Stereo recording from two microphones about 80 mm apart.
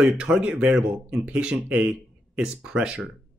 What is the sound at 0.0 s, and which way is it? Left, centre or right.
Speech, centre.